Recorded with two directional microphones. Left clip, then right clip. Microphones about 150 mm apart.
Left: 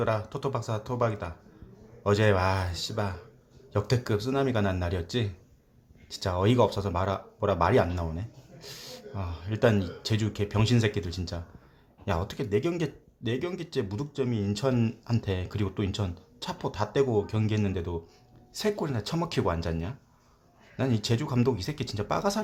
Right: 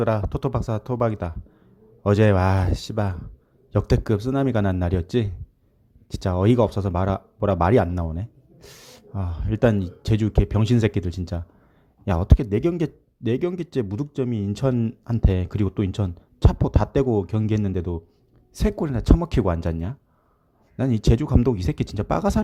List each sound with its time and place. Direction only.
0.0 s speech: 50° right (ahead or behind)